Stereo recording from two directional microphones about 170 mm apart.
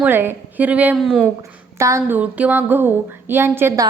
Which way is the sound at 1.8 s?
15° right (ahead or behind).